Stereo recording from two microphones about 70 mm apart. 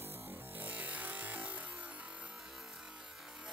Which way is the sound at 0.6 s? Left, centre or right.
Right.